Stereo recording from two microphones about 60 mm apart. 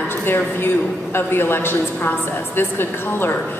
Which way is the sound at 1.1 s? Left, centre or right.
Left.